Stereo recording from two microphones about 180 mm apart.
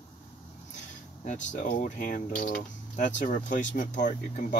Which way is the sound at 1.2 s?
45° left (ahead or behind).